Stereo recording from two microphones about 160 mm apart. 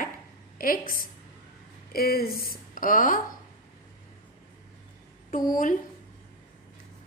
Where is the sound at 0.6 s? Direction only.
60° left (ahead or behind).